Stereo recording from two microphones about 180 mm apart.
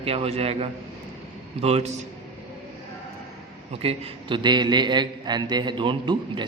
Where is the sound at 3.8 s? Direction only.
30° right (ahead or behind).